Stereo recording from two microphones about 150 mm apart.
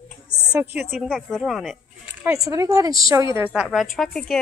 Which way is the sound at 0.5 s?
15° right (ahead or behind).